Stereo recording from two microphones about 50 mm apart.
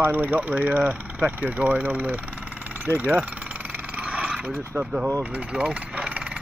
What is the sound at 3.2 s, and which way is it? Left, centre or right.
Vehicle, right.